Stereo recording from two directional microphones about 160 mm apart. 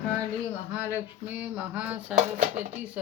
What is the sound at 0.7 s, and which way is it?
Speech, 10° right (ahead or behind).